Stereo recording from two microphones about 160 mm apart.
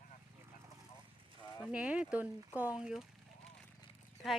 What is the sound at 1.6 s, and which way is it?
Speech, 5° right (ahead or behind).